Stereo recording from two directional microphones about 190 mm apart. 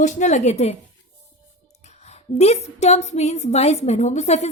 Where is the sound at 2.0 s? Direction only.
35° left (ahead or behind).